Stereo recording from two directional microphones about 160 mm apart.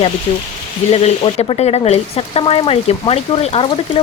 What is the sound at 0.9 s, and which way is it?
Speech, 40° left (ahead or behind).